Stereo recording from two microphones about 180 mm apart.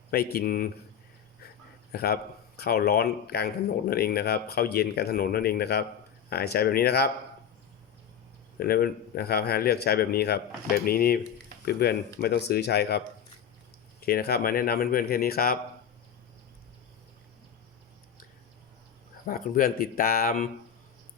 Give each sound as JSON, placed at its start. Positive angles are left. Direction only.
{"t": 0.1, "sound": "speech", "side_deg": 60}
{"t": 1.9, "sound": "a man's voice", "side_deg": 60}
{"t": 8.5, "sound": "speech", "side_deg": 55}
{"t": 14.0, "sound": "speech", "side_deg": 60}
{"t": 19.2, "sound": "speech", "side_deg": 50}